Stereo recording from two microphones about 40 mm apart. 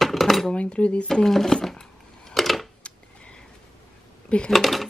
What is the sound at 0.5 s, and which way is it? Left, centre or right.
Speech, left.